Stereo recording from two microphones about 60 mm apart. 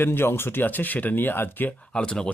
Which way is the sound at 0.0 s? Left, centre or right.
Left.